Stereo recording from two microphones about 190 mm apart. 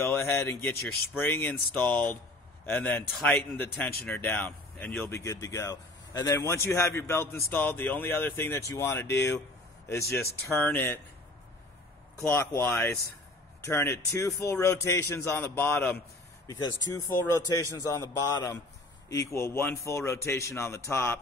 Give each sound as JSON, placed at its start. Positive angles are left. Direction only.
{"t": 0.1, "sound": "speech", "side_deg": 15}
{"t": 12.2, "sound": "speech", "side_deg": 10}